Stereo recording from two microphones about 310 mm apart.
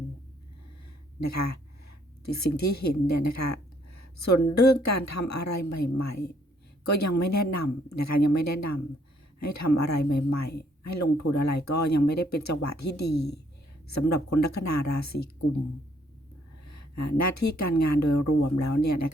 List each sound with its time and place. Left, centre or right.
1.2 s speech: left
3.1 s a sound: left
4.5 s speech: left
12.9 s a woman's voice: left
13.8 s speech: left
16.6 s speech: left